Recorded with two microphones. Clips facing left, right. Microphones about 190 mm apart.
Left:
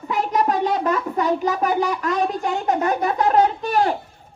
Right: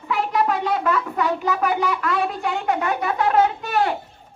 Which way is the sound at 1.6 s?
40° left (ahead or behind).